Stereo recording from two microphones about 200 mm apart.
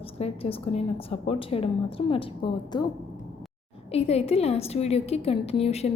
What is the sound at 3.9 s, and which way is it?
A woman's voice, 30° left (ahead or behind).